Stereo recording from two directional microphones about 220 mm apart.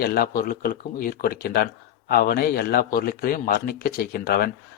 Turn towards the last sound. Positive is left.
turn(degrees=45)  # may be behind; listen again after turning